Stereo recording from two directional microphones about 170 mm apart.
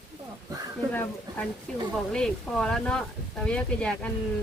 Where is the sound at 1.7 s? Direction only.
5° left (ahead or behind).